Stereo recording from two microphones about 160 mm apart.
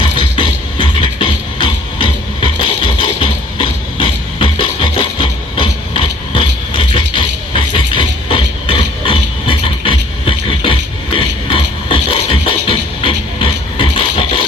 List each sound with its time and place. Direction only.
0.2 s music: 30° left (ahead or behind)